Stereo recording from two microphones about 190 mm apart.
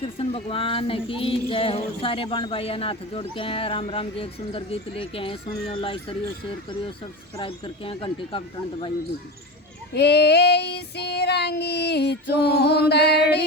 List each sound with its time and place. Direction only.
0.0 s speech: 30° left (ahead or behind)
7.3 s speech: 30° left (ahead or behind)
9.9 s female singing: 60° left (ahead or behind)